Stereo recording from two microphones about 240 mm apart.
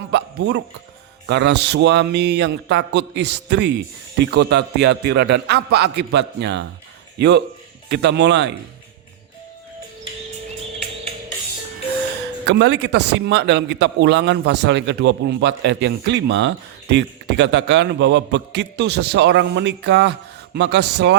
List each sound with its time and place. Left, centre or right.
0.1 s bow-wow: right
1.3 s a man's voice: right
12.5 s a man's voice: right